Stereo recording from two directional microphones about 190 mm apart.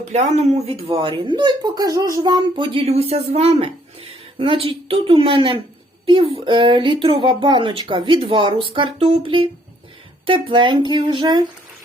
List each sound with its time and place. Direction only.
0.0 s speech: 35° right (ahead or behind)